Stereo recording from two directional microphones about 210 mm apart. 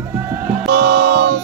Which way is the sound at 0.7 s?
55° right (ahead or behind).